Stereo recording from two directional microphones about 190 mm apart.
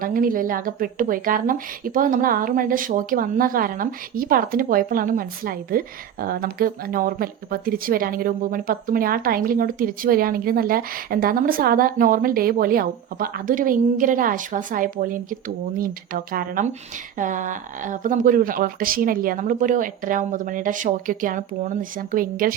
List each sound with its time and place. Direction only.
0.0 s speech: 45° right (ahead or behind)